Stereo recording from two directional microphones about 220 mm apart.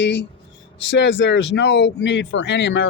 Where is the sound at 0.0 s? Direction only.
55° left (ahead or behind).